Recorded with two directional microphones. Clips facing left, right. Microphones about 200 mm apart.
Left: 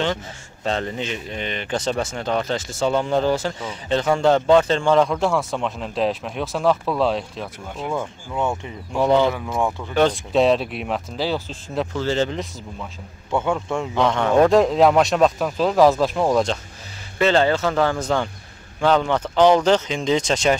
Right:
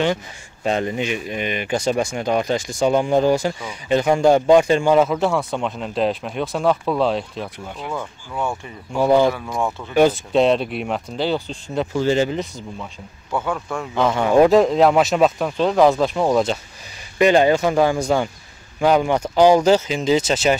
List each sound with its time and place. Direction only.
0.7 s speech: 15° right (ahead or behind)
7.9 s speech: 20° left (ahead or behind)
8.9 s speech: 10° right (ahead or behind)
11.9 s speech: 15° right (ahead or behind)
13.5 s speech: 25° left (ahead or behind)
13.9 s speech: 5° right (ahead or behind)
17.2 s speech: 15° right (ahead or behind)